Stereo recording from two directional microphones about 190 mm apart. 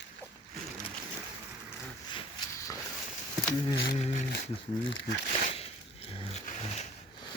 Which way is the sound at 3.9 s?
40° left (ahead or behind).